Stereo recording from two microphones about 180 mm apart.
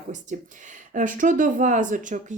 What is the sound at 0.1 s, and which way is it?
Speech, 45° right (ahead or behind).